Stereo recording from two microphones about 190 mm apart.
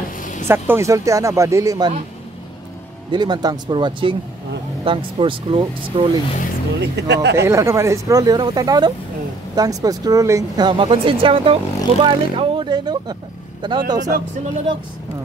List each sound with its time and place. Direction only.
0.2 s vehicle: 40° left (ahead or behind)
0.5 s speech: 15° right (ahead or behind)
3.1 s speech: 20° right (ahead or behind)
6.8 s speech: 65° right (ahead or behind)
7.3 s speech: 15° right (ahead or behind)